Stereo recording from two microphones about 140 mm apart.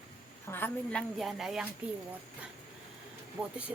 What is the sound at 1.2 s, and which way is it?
Speech, centre (ahead or behind).